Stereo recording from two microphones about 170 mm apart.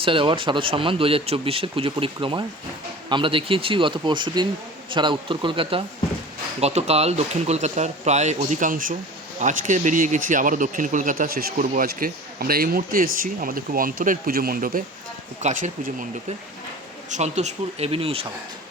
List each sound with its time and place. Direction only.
0.0 s speech: 30° right (ahead or behind); by 14.8 s 55° right (ahead or behind)
15.4 s speech: 45° right (ahead or behind)
17.1 s speech: 45° right (ahead or behind)